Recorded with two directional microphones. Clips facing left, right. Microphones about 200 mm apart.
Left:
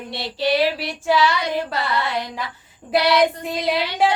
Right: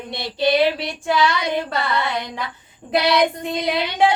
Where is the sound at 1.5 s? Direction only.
Centre (ahead or behind).